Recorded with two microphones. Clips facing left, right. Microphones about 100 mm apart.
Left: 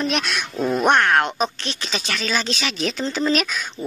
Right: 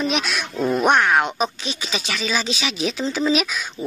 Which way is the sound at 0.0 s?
Centre (ahead or behind).